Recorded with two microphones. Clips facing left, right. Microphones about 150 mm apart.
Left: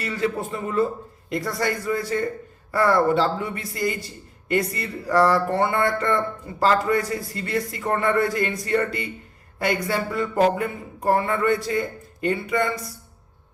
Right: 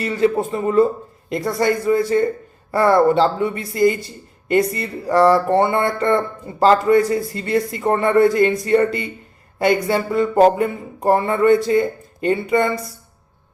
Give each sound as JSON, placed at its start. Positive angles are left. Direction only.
{"t": 0.0, "sound": "speech", "side_deg": -25}